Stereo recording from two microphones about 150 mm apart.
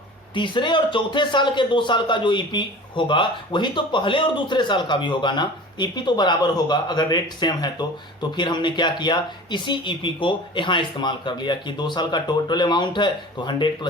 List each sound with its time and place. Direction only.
0.3 s speech: 30° left (ahead or behind)